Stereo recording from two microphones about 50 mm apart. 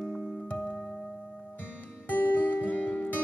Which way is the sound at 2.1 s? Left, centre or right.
Left.